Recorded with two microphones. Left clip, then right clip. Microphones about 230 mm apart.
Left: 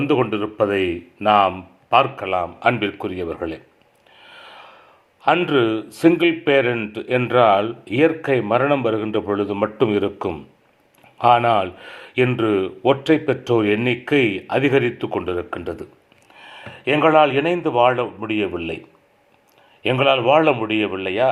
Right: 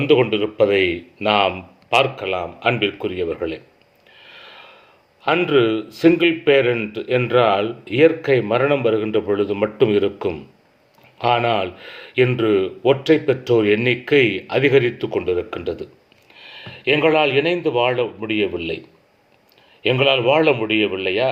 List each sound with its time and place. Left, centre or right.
0.0 s speech: centre
4.4 s snort: centre
5.3 s speech: centre
19.8 s speech: centre